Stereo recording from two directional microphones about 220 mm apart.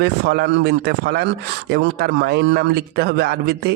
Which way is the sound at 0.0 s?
50° right (ahead or behind).